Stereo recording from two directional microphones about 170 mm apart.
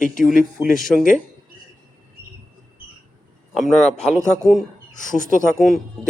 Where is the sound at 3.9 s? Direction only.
5° left (ahead or behind).